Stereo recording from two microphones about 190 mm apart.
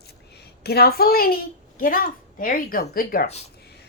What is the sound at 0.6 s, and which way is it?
A woman's voice, 55° left (ahead or behind).